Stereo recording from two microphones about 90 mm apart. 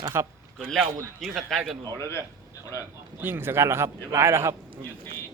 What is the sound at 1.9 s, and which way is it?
Speech, 30° left (ahead or behind).